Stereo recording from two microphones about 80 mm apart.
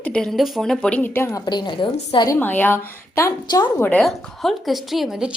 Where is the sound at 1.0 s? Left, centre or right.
Left.